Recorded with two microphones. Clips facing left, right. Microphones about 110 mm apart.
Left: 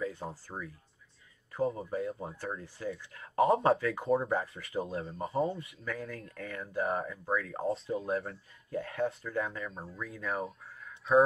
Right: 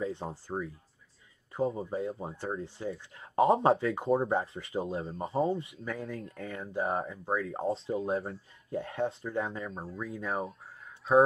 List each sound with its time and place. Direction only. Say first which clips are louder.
0.0 s speech: right 2 dB; 25° right (ahead or behind)